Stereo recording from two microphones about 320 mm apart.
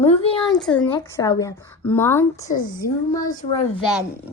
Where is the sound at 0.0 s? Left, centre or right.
Centre.